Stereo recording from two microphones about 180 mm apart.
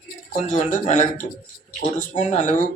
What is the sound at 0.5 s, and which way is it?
Speech, 45° left (ahead or behind).